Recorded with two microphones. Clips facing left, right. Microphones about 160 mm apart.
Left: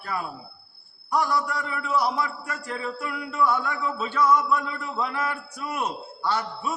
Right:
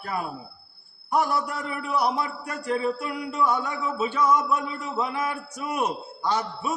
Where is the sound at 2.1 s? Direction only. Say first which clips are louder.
Even; 20° right (ahead or behind).